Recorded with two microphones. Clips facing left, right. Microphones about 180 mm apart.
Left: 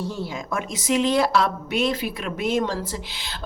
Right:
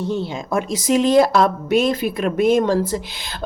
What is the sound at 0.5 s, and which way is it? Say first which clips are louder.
Speech: right 6 dB; 40° right (ahead or behind).